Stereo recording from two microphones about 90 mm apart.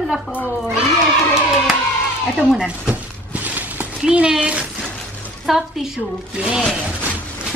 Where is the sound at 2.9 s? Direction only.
15° right (ahead or behind).